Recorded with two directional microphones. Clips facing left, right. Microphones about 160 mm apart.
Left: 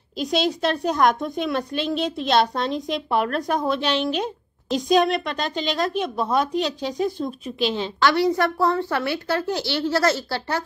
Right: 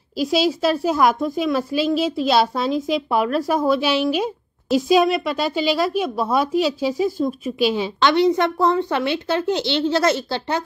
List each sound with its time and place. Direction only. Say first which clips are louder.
0.2 s a woman's voice: right 3 dB; 5° right (ahead or behind)
8.0 s a woman's voice: right 3 dB; 20° right (ahead or behind)